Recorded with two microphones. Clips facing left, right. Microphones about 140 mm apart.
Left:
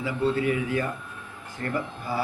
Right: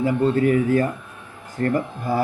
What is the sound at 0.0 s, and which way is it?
Speech, 50° right (ahead or behind).